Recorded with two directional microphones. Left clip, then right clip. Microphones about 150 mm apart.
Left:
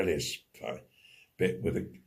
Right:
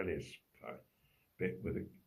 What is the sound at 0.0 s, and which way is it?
Speech, 40° left (ahead or behind).